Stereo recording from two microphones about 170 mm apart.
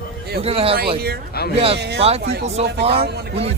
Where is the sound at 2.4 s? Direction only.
35° right (ahead or behind).